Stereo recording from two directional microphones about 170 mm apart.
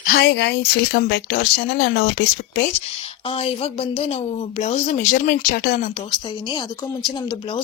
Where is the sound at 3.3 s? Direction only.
35° left (ahead or behind); by 5.9 s 60° left (ahead or behind).